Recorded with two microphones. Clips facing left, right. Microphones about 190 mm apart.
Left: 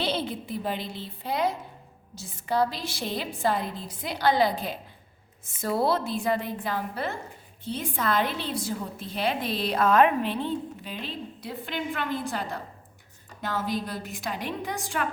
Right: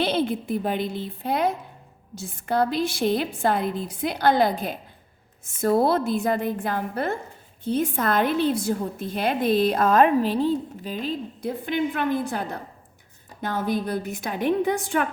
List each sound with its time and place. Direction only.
0.0 s a woman's voice: 55° right (ahead or behind)